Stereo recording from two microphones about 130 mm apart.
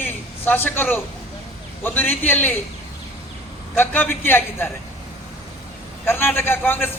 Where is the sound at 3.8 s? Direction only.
15° left (ahead or behind).